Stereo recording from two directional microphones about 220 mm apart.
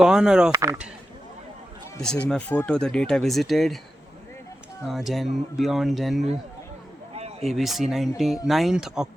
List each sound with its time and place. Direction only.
0.0 s speech: 5° right (ahead or behind)
2.0 s speech: 5° left (ahead or behind)
4.9 s speech: centre (ahead or behind)
7.2 s a sound: 30° right (ahead or behind)
7.4 s speech: centre (ahead or behind)